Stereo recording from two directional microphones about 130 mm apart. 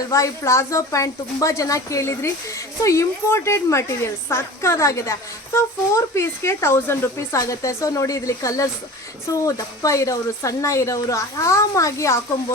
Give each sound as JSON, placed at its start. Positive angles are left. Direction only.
{"t": 0.1, "sound": "speech", "side_deg": 25}